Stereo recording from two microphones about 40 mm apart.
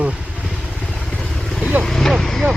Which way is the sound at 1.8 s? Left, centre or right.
Centre.